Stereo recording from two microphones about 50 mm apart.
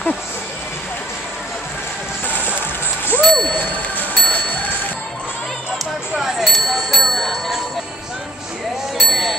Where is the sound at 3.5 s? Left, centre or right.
Left.